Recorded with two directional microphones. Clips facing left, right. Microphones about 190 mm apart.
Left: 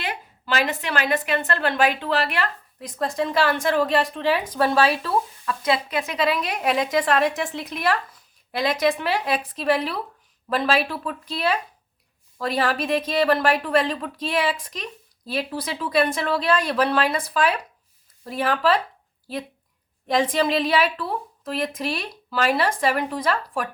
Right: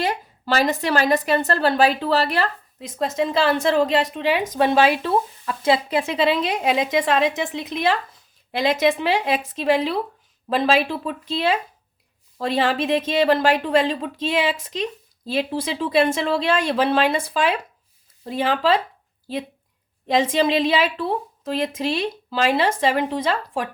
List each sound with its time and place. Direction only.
0.0 s a woman's voice: 40° right (ahead or behind)
2.8 s a woman's voice: 20° right (ahead or behind)
20.1 s a woman's voice: 25° right (ahead or behind)